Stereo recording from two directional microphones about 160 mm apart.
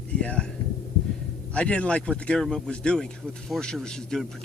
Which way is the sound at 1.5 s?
5° left (ahead or behind).